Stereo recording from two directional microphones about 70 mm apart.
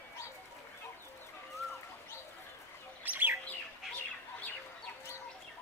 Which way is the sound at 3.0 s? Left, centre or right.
Right.